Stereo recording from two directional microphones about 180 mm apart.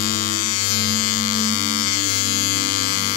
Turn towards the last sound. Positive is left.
turn(degrees=50)  # may be behind; listen again after turning